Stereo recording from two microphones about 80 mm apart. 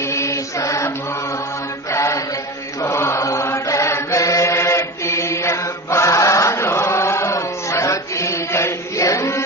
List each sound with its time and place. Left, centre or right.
0.0 s chant: left
1.9 s mantra: left
2.8 s chant: left